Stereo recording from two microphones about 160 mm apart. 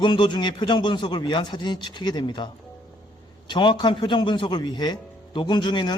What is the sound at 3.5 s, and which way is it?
A man's voice, 30° left (ahead or behind).